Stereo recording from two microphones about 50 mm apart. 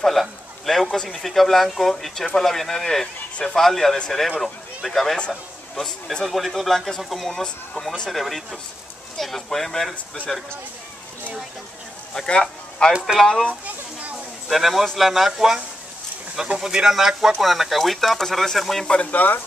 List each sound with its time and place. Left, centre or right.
0.0 s speech: centre
12.1 s speech: centre
13.0 s speech: centre
13.5 s a sound: right
14.5 s speech: centre
18.9 s speech: left
19.1 s speech: left